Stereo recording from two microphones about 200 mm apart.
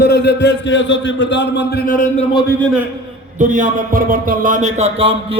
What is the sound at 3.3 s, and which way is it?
A man's voice, 40° right (ahead or behind).